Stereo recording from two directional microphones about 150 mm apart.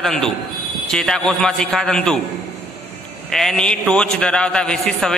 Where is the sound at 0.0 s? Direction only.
5° left (ahead or behind).